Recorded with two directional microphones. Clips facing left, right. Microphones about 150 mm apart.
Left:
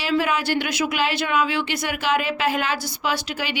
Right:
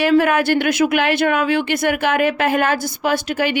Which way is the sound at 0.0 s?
55° right (ahead or behind).